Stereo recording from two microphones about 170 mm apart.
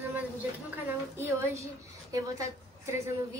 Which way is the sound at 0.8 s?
15° right (ahead or behind).